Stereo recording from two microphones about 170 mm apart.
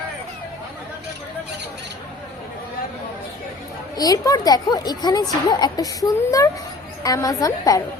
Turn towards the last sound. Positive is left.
turn(degrees=20)  # may be behind; listen again after turning